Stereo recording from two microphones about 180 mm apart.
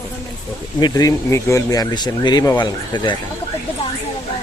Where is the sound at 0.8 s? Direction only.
20° left (ahead or behind).